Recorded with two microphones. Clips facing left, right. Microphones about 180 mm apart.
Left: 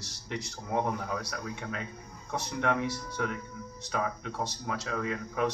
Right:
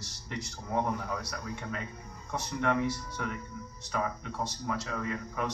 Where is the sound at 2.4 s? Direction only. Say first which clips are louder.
Even; 70° left (ahead or behind).